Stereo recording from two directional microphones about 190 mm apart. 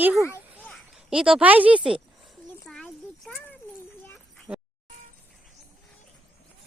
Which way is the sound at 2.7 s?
Centre (ahead or behind).